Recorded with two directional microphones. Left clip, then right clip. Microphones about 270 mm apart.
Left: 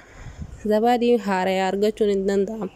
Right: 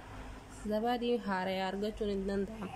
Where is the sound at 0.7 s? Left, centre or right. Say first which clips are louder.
Left 15 dB; left.